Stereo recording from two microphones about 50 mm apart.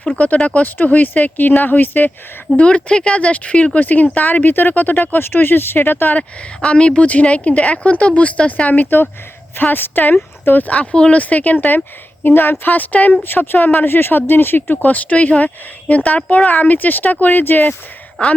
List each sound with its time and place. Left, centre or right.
0.4 s speech: left
2.6 s speech: left
6.1 s speech: left
9.6 s speech: left
10.9 s speech: centre
11.2 s speech: left
12.2 s speech: left
18.2 s speech: left